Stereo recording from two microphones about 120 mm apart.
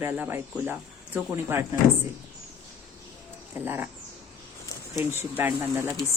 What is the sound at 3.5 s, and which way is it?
Speech, 20° right (ahead or behind).